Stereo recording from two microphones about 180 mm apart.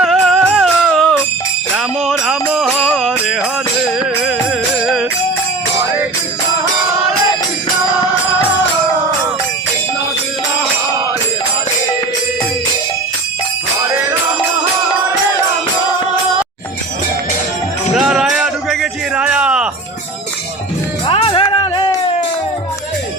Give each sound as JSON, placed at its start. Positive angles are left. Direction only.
{"t": 0.0, "sound": "music", "side_deg": 0}
{"t": 17.9, "sound": "a sound", "side_deg": 0}
{"t": 21.1, "sound": "music", "side_deg": 30}